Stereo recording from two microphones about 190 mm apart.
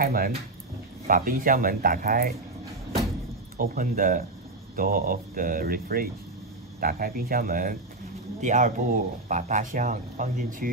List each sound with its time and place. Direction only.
0.0 s speech: 50° right (ahead or behind)
3.5 s speech: 45° right (ahead or behind)